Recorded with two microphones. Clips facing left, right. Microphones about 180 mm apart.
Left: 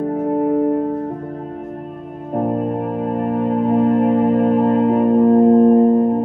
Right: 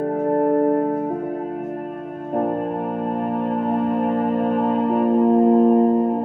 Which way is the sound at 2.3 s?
Centre (ahead or behind).